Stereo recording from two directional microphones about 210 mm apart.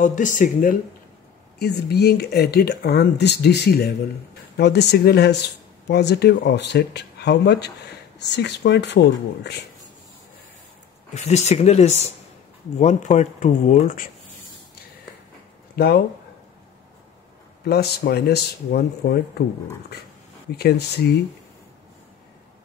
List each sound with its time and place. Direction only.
0.0 s speech: 35° left (ahead or behind)
1.6 s speech: 50° left (ahead or behind)
11.1 s speech: 30° left (ahead or behind)
15.7 s speech: 50° left (ahead or behind)
17.6 s speech: 50° left (ahead or behind)
20.5 s speech: 50° left (ahead or behind)